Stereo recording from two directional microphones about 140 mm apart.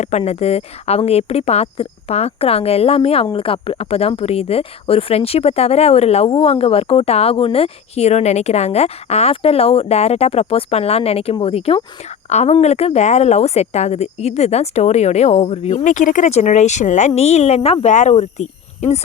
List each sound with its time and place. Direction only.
0.0 s speech: 50° left (ahead or behind)
15.8 s speech: 65° left (ahead or behind)